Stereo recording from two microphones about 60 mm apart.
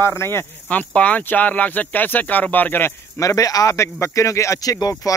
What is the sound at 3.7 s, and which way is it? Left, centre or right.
Speech, left.